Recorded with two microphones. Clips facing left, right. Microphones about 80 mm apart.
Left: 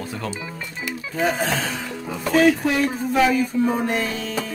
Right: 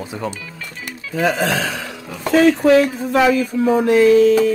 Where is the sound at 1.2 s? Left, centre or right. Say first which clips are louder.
Right 4 dB; right.